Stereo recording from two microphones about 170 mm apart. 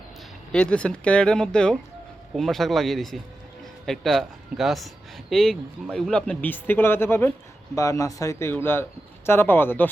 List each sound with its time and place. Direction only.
0.5 s speech: 5° left (ahead or behind)